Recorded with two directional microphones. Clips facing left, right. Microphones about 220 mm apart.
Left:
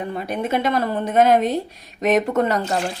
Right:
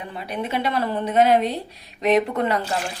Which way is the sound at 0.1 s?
45° left (ahead or behind).